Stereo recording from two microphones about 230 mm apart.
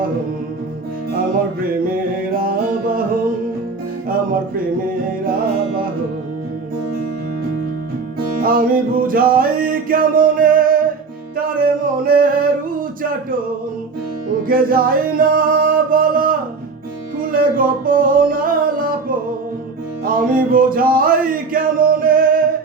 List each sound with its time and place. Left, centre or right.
2.3 s music: right
8.4 s music: right
14.4 s music: right
20.1 s music: right